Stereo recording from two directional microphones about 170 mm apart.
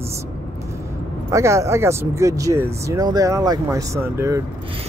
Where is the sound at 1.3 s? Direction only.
15° right (ahead or behind).